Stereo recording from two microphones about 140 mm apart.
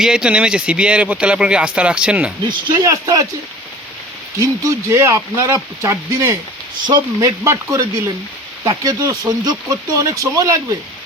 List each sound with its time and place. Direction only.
0.0 s speech: 5° right (ahead or behind)
2.5 s speech: 30° right (ahead or behind)
4.4 s speech: 20° right (ahead or behind)